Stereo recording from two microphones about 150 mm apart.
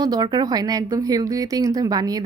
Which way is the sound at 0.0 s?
30° right (ahead or behind).